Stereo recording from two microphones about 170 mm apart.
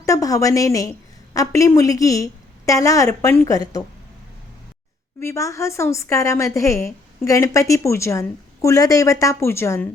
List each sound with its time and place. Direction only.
0.0 s a woman's voice: 20° left (ahead or behind)
5.2 s a woman's voice: 15° left (ahead or behind)